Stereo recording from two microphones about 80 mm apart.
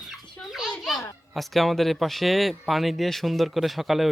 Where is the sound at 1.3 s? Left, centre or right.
Centre.